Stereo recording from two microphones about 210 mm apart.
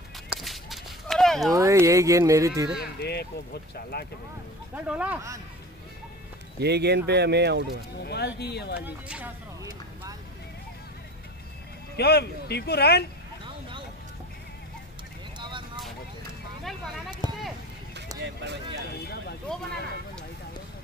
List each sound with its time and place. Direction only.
0.3 s a sound: centre (ahead or behind)
1.5 s speech: 15° right (ahead or behind)
2.8 s a man's voice: 50° left (ahead or behind)
4.8 s speech: 5° right (ahead or behind)
6.6 s speech: 50° right (ahead or behind)
8.0 s a man's voice: 50° left (ahead or behind)
8.8 s speech: 10° right (ahead or behind)
12.0 s a man's voice: 50° left (ahead or behind)
15.3 s vehicle: 20° right (ahead or behind)
17.2 s a sound: 25° left (ahead or behind)
18.2 s speech: 55° right (ahead or behind)